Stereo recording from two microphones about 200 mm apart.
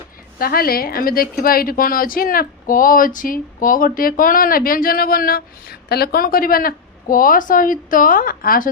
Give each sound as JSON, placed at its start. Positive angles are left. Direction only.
{"t": 0.3, "sound": "a woman's voice", "side_deg": 50}